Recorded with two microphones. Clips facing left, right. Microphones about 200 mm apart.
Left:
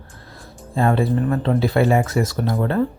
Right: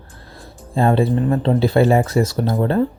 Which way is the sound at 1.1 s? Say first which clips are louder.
Right 2 dB; 20° right (ahead or behind).